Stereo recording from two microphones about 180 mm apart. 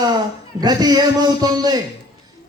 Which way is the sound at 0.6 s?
20° right (ahead or behind).